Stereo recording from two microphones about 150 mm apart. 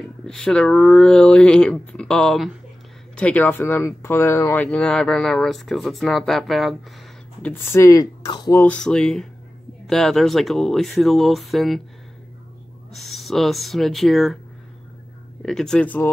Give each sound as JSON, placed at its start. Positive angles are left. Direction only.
{"t": 0.0, "sound": "speech", "side_deg": 5}
{"t": 7.4, "sound": "speech", "side_deg": 15}
{"t": 8.6, "sound": "speech", "side_deg": 5}
{"t": 12.9, "sound": "speech", "side_deg": 0}
{"t": 15.4, "sound": "speech", "side_deg": 5}